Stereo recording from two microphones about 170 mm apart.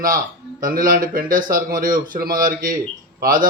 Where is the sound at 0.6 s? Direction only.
55° right (ahead or behind).